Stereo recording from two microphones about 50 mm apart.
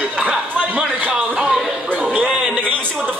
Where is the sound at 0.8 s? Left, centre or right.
Right.